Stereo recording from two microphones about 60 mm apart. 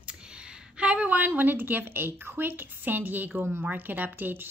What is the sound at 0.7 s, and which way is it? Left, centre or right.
A woman's voice, right.